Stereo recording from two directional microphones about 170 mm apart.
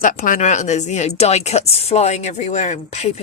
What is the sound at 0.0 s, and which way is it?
Speech, 50° left (ahead or behind).